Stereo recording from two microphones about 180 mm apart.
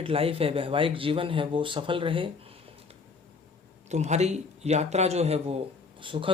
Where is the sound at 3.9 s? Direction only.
40° right (ahead or behind).